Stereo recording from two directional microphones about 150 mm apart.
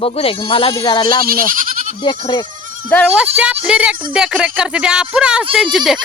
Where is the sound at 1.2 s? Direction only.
75° right (ahead or behind).